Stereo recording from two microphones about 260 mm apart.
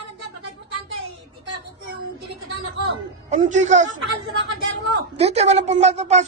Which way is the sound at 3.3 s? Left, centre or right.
Right.